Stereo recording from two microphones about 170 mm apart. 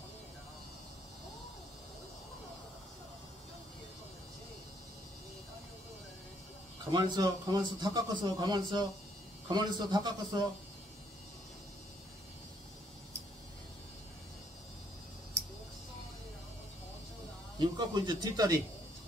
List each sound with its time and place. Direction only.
6.9 s a man's voice: 25° right (ahead or behind)
17.6 s speech: 25° right (ahead or behind)